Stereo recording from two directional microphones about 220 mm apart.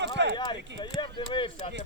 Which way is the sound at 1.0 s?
20° left (ahead or behind).